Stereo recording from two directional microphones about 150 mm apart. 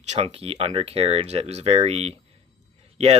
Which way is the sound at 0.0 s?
45° right (ahead or behind).